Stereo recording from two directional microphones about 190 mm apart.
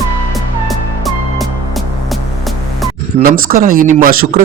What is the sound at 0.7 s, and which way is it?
Music, centre (ahead or behind).